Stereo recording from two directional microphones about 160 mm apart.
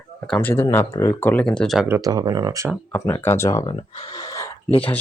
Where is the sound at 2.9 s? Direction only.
15° left (ahead or behind).